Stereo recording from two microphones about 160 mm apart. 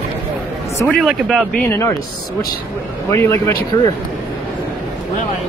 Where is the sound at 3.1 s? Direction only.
15° left (ahead or behind).